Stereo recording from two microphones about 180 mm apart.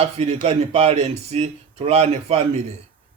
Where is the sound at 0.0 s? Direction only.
35° right (ahead or behind).